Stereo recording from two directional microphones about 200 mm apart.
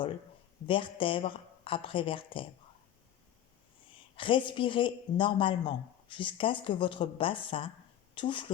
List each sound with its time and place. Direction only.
0.7 s a woman's voice: 25° left (ahead or behind)
3.9 s a woman's voice: 25° left (ahead or behind)